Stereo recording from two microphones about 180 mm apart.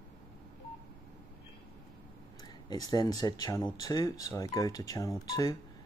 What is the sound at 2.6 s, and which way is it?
Speech, 20° left (ahead or behind).